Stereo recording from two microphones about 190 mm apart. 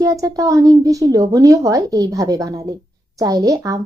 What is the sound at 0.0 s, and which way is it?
A woman's voice, 15° right (ahead or behind).